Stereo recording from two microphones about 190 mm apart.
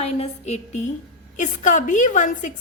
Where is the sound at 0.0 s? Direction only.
35° left (ahead or behind).